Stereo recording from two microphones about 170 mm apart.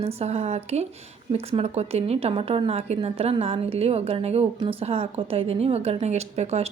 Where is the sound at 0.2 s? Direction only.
40° right (ahead or behind).